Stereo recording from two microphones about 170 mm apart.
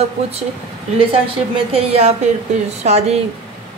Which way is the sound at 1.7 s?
40° right (ahead or behind).